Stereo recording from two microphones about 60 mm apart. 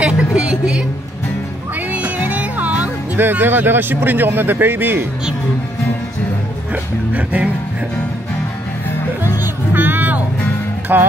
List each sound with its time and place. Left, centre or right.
0.0 s a sound: centre
1.9 s music: right
6.7 s speech: right
9.2 s music: right